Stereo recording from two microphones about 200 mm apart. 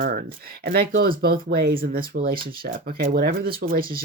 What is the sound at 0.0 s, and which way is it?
Speech, 45° right (ahead or behind).